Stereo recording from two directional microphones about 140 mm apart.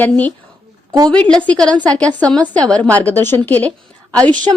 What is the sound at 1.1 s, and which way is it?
A woman's voice, 10° left (ahead or behind).